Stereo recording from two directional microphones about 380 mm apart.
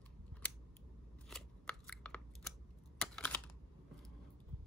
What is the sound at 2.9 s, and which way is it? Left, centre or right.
Computer keyboard, centre.